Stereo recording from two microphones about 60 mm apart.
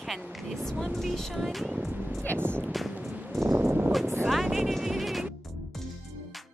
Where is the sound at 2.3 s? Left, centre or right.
Right.